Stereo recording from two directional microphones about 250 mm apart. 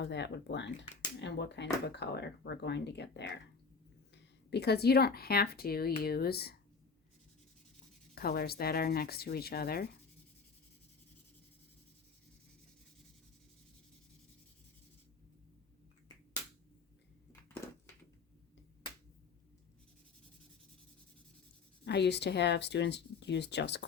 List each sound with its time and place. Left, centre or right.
0.0 s speech: left
8.1 s speech: left
21.8 s speech: left